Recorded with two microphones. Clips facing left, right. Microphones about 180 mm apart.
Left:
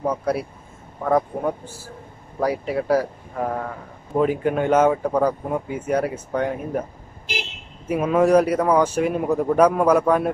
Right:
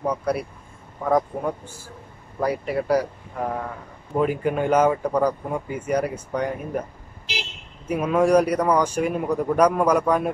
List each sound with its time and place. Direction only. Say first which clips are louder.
0.0 s speech: left 1 dB; 5° left (ahead or behind)
7.3 s vehicle: left 3 dB; 50° left (ahead or behind)
7.9 s speech: left 2 dB; 5° left (ahead or behind)